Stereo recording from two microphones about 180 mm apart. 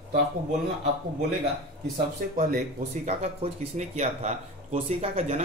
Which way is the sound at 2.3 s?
40° right (ahead or behind).